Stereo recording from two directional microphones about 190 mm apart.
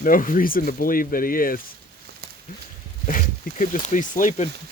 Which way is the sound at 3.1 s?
45° left (ahead or behind).